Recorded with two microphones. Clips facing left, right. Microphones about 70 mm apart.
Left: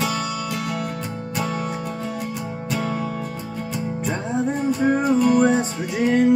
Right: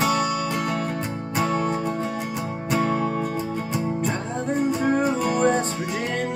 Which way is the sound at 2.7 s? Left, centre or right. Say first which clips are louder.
Right 3 dB; right.